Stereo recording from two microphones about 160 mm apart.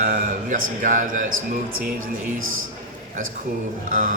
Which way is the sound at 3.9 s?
55° right (ahead or behind).